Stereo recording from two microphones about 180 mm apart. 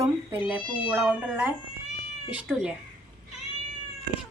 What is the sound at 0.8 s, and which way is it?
A woman's voice, 5° right (ahead or behind).